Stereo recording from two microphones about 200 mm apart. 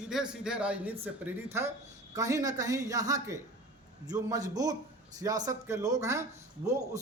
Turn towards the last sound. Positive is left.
turn(degrees=-15)  # may be behind; listen again after turning